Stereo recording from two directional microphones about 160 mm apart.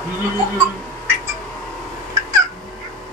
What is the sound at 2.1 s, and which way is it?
Fowl, 20° right (ahead or behind).